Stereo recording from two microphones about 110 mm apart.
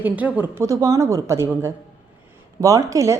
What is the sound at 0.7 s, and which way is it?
A woman's voice, 30° right (ahead or behind).